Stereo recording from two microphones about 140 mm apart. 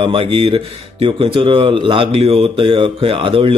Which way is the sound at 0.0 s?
40° right (ahead or behind).